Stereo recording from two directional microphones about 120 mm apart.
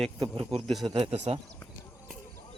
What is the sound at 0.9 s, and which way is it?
Speech, 55° right (ahead or behind).